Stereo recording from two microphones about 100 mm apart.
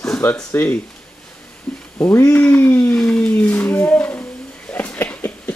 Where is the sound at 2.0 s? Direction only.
25° left (ahead or behind).